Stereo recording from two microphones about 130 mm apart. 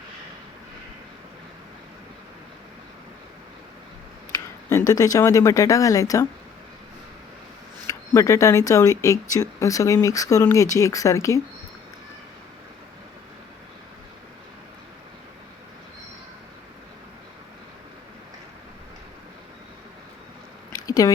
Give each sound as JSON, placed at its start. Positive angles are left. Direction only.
{"t": 4.9, "sound": "speech", "side_deg": 30}
{"t": 7.9, "sound": "speech", "side_deg": 25}
{"t": 20.7, "sound": "squish", "side_deg": 30}